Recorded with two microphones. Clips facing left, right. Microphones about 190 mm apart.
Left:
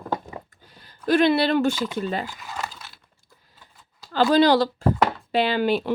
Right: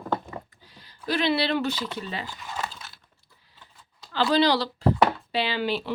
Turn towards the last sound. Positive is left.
turn(degrees=50)  # may be behind; listen again after turning